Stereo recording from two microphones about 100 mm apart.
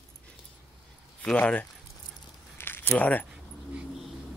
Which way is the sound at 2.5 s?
20° left (ahead or behind).